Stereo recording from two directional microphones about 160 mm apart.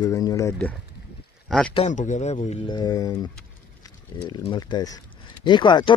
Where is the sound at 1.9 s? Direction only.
50° left (ahead or behind).